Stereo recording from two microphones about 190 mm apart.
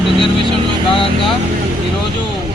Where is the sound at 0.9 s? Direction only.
30° left (ahead or behind).